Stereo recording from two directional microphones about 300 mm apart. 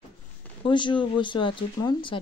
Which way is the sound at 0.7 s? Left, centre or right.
Centre.